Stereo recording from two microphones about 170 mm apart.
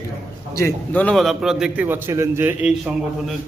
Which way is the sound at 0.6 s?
10° left (ahead or behind).